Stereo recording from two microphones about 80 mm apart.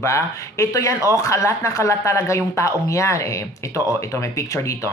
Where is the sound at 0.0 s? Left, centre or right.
Left.